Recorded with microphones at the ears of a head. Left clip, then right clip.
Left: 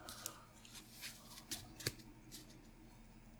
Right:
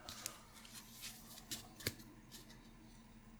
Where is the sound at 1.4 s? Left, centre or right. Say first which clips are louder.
Even; centre.